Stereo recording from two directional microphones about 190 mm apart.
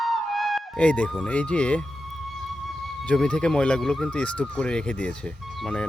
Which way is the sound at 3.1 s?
5° left (ahead or behind).